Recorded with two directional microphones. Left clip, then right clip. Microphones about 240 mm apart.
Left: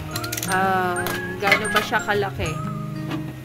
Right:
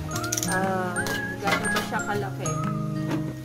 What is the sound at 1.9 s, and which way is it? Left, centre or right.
Speech, left.